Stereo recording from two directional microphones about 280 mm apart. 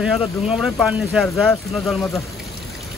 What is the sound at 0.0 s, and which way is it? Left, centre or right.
Speech, centre.